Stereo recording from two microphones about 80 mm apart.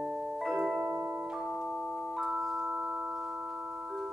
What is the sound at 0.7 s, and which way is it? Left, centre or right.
Music, right.